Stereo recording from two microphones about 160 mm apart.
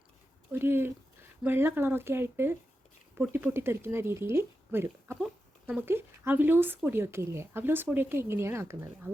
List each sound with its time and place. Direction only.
0.5 s speech: 15° right (ahead or behind)